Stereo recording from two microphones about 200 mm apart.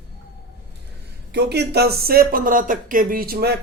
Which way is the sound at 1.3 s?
55° right (ahead or behind).